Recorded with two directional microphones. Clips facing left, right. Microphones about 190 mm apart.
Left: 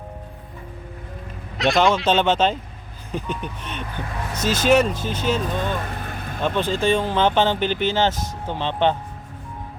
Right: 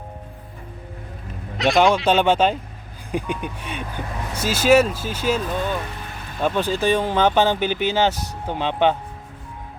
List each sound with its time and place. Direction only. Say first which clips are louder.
1.5 s speech: right 1 dB; centre (ahead or behind)
2.0 s speech: right 1 dB; 10° right (ahead or behind)
5.8 s vehicle: left 3 dB; 50° left (ahead or behind)
6.4 s speech: right 1 dB; 10° right (ahead or behind)